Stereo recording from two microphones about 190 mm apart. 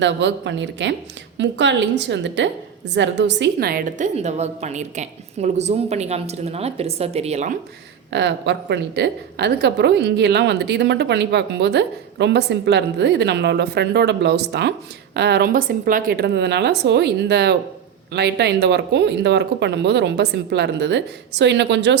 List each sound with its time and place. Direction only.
0.0 s a woman's voice: 70° right (ahead or behind); by 7.5 s 35° right (ahead or behind)
8.1 s a woman's voice: 65° right (ahead or behind)